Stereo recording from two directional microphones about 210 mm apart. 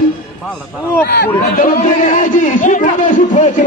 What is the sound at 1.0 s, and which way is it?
Speech, 50° left (ahead or behind).